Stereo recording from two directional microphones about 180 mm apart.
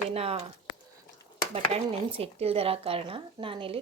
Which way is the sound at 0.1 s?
35° right (ahead or behind).